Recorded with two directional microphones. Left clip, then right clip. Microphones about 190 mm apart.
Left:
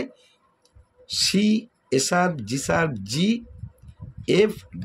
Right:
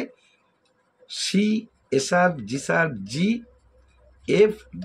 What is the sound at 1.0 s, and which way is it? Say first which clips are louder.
Speech: left 3 dB; 55° left (ahead or behind).